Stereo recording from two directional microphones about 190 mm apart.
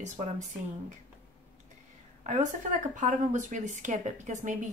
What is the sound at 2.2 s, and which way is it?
A woman's voice, 40° right (ahead or behind).